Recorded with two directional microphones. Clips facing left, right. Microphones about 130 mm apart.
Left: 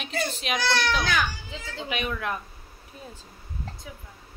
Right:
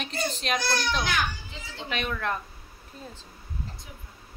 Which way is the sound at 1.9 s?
10° left (ahead or behind).